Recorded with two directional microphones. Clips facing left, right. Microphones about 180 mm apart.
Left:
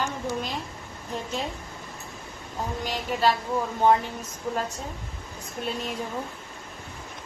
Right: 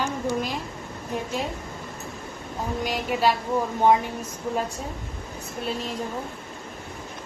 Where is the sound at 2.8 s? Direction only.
10° right (ahead or behind).